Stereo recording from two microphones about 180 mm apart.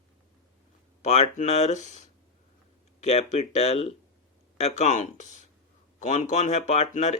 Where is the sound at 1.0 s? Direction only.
40° left (ahead or behind).